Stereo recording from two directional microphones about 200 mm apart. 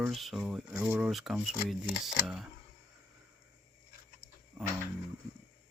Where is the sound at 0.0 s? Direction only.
Centre (ahead or behind).